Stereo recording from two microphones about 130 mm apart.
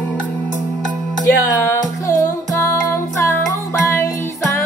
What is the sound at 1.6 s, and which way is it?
Music, 20° left (ahead or behind).